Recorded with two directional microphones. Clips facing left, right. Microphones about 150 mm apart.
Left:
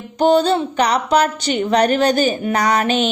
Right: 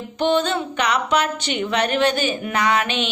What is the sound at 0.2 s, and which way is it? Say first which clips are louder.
A woman's voice: left 6 dB; 35° left (ahead or behind).